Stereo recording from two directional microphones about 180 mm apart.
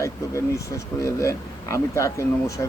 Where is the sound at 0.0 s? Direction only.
15° left (ahead or behind).